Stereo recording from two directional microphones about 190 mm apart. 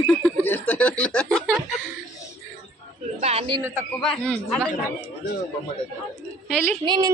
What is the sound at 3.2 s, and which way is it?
Speech, 35° right (ahead or behind).